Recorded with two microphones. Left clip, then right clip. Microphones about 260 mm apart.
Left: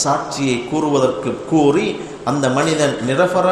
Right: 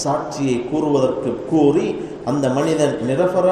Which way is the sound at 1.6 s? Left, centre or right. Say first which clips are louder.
Left 1 dB; left.